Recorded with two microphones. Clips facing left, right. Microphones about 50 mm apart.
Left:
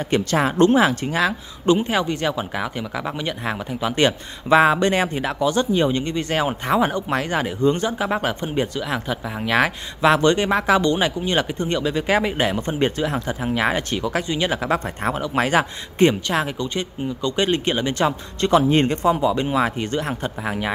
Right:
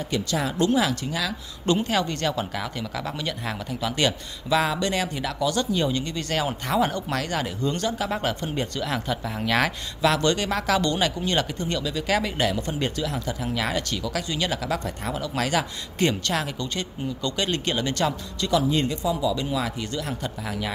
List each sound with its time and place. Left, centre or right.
0.1 s speech: left
1.7 s speech: centre
10.0 s speech: left
18.4 s speech: left